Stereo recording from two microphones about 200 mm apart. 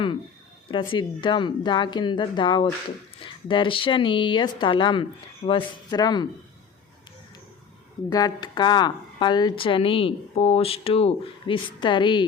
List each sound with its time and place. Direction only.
0.7 s speech: 25° left (ahead or behind)
5.9 s speech: 20° left (ahead or behind)
8.1 s speech: 20° left (ahead or behind)